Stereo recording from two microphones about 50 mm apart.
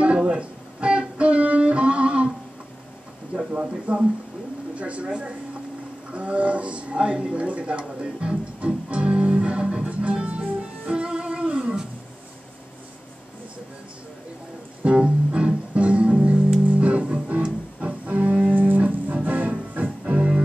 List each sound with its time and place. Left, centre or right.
0.0 s guitar: right
3.5 s a sound: right
6.1 s a sound: right
9.8 s music: right
15.0 s music: centre
18.5 s music: right